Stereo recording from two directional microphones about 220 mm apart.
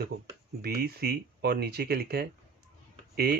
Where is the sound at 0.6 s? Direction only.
45° right (ahead or behind).